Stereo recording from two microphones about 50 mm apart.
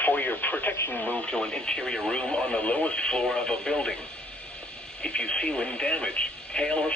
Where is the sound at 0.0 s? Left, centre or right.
Left.